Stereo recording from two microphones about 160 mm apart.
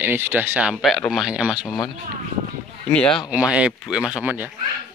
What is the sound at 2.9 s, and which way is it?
Speech, 5° left (ahead or behind).